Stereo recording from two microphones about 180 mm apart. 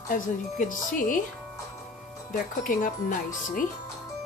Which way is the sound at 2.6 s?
45° left (ahead or behind).